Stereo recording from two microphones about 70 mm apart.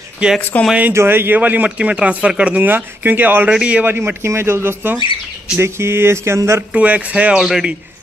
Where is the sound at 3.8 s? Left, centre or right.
Right.